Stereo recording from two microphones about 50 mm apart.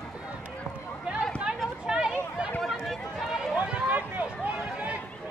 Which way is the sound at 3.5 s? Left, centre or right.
Right.